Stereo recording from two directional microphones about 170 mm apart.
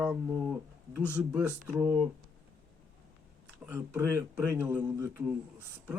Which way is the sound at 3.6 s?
15° right (ahead or behind).